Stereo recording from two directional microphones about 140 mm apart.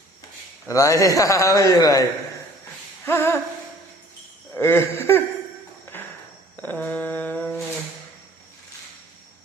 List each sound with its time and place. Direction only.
0.7 s a man's voice: 25° left (ahead or behind)
3.1 s mantra: 15° left (ahead or behind)
4.5 s mantra: 15° left (ahead or behind)
5.9 s walk: 15° left (ahead or behind)
6.6 s mantra: 15° left (ahead or behind)